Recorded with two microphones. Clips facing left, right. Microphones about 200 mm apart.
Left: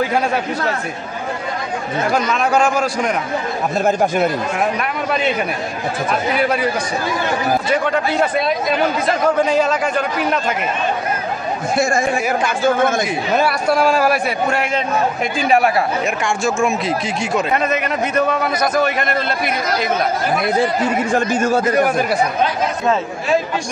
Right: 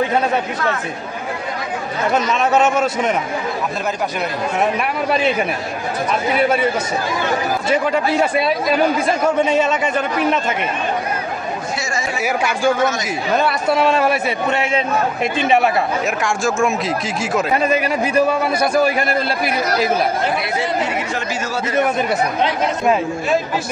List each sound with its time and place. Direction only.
2.0 s speech: 5° right (ahead or behind)
3.8 s speech: 50° left (ahead or behind)
7.8 s speech: 5° right (ahead or behind)
11.7 s speech: 55° left (ahead or behind)
12.2 s speech: 10° right (ahead or behind)
12.7 s speech: 55° left (ahead or behind)
13.4 s speech: centre (ahead or behind)
15.4 s speech: centre (ahead or behind)
17.6 s a man's voice: 30° right (ahead or behind)
18.2 s speech: 5° right (ahead or behind)
20.5 s speech: 50° left (ahead or behind)
21.7 s speech: centre (ahead or behind)